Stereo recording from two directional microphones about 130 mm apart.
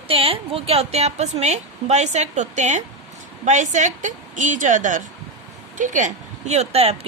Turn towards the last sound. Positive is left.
turn(degrees=-50)  # may be behind; listen again after turning